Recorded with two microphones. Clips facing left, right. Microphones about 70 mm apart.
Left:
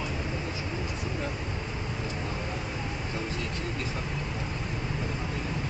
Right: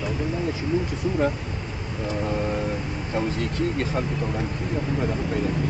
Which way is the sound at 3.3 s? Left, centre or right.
Right.